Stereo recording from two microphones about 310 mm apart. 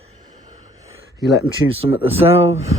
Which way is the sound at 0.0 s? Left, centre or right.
Centre.